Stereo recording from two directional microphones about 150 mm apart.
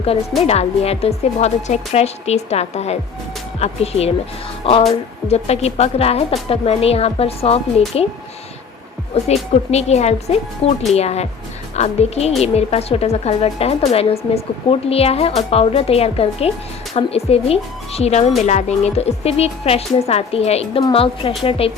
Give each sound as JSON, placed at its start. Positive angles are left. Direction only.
{"t": 0.0, "sound": "speech", "side_deg": 40}
{"t": 9.1, "sound": "a woman's voice", "side_deg": 45}